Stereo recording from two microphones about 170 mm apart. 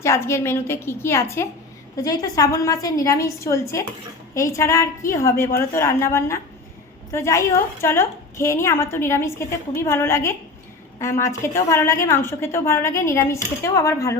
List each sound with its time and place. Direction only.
0.0 s a woman's voice: 15° left (ahead or behind)